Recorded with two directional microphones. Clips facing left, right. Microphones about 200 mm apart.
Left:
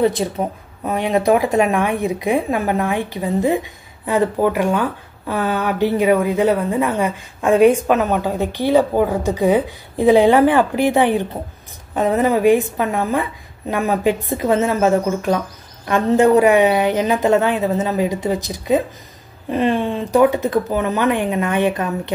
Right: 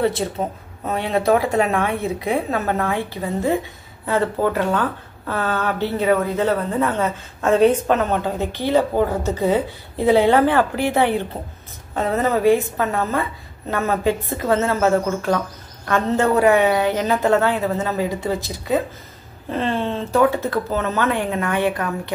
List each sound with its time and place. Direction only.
0.0 s speech: 15° left (ahead or behind)